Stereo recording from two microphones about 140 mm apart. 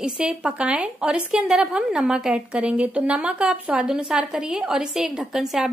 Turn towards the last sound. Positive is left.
turn(degrees=-5)  # may be behind; listen again after turning